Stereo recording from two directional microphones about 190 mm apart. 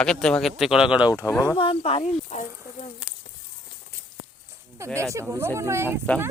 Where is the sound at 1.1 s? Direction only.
15° left (ahead or behind); by 2.9 s 35° left (ahead or behind).